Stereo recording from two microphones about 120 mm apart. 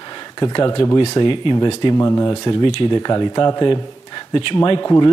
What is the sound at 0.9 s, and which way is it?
Speech, 40° left (ahead or behind).